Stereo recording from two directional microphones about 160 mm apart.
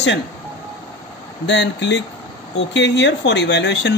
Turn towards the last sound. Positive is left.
turn(degrees=90)